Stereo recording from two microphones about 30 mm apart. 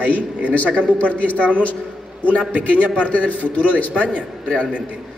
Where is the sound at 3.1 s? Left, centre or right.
Left.